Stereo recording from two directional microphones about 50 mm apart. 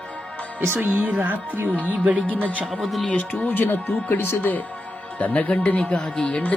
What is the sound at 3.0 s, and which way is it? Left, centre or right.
A man's voice, left.